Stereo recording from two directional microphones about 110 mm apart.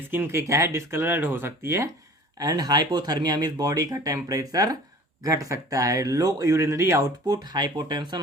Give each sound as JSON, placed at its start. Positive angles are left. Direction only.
{"t": 0.1, "sound": "speech", "side_deg": -20}
{"t": 2.4, "sound": "speech", "side_deg": -35}
{"t": 7.3, "sound": "speech", "side_deg": -40}